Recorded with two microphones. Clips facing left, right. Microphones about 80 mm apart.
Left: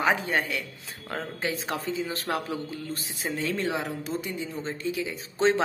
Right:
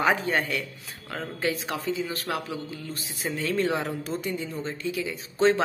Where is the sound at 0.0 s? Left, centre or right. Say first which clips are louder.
Right 1 dB; centre.